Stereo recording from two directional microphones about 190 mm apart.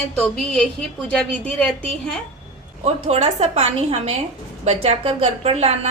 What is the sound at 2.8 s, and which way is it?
A woman's voice, 35° right (ahead or behind).